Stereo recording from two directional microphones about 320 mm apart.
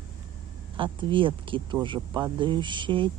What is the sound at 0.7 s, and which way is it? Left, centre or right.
Speech, centre.